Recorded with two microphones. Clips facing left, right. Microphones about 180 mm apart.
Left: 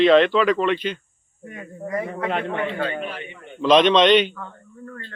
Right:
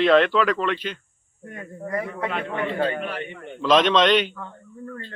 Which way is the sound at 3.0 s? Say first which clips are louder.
Right 1 dB; 50° right (ahead or behind).